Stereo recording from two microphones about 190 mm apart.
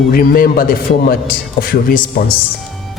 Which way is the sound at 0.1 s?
50° left (ahead or behind).